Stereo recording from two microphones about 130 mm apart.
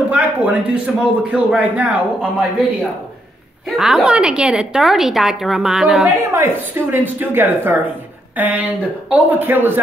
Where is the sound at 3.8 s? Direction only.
5° right (ahead or behind).